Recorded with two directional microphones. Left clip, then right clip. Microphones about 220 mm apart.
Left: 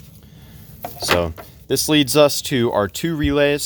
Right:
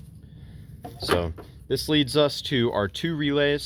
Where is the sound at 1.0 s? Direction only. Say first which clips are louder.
Left 6 dB; 40° left (ahead or behind).